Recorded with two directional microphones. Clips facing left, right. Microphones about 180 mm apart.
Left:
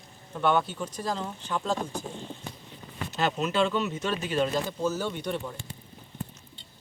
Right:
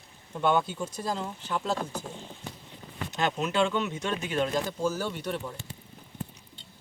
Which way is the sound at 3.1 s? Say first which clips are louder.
Left 1 dB; 5° left (ahead or behind).